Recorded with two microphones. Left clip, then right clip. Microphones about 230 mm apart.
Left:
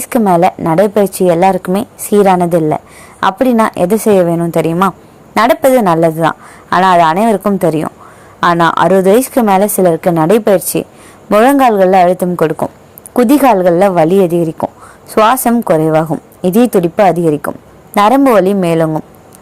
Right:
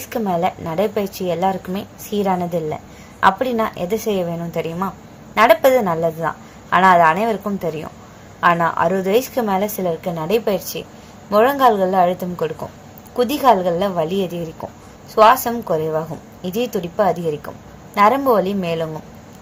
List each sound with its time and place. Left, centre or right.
0.0 s a woman's voice: left